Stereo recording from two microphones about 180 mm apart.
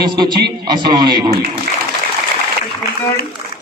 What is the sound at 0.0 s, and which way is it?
A man's voice, 25° right (ahead or behind).